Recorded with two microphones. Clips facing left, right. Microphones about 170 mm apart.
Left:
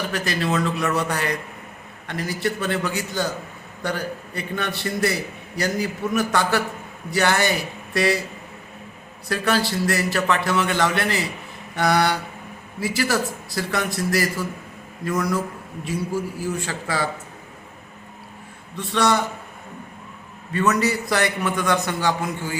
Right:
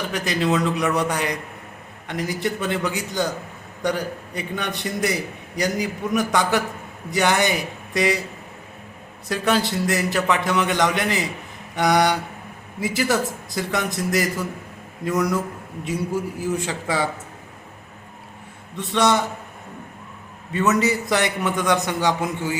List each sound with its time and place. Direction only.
0.1 s a man's voice: 20° right (ahead or behind)
9.3 s a man's voice: 20° right (ahead or behind)
15.8 s a man's voice: 20° right (ahead or behind)
18.9 s a man's voice: 20° right (ahead or behind)
20.5 s a man's voice: 20° right (ahead or behind)